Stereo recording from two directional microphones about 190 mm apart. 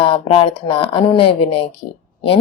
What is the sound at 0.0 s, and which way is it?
A woman's voice, 30° left (ahead or behind).